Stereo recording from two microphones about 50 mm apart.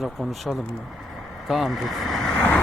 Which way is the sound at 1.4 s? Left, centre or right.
Centre.